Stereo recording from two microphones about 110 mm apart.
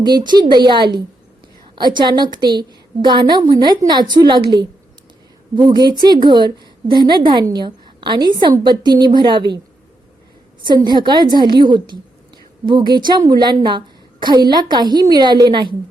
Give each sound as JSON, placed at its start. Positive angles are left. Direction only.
{"t": 0.0, "sound": "a woman's voice", "side_deg": -40}
{"t": 10.8, "sound": "a woman's voice", "side_deg": -40}